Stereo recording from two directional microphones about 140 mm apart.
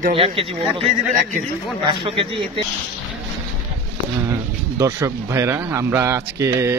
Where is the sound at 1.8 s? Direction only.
40° right (ahead or behind).